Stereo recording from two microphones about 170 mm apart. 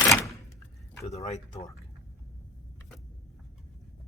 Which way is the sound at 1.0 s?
40° left (ahead or behind).